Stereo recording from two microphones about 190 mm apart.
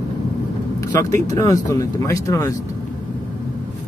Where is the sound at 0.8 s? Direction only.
15° left (ahead or behind).